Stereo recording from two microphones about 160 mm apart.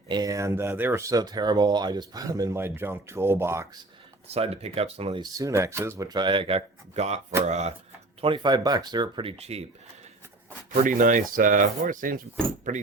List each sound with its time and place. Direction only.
0.1 s speech: 20° right (ahead or behind)
4.3 s speech: 40° right (ahead or behind)
5.2 s speech: 20° right (ahead or behind)
6.1 s speech: 30° right (ahead or behind); by 7.7 s 45° right (ahead or behind)
8.2 s speech: 30° right (ahead or behind)
9.4 s speech: 40° right (ahead or behind)
10.8 s speech: 55° right (ahead or behind)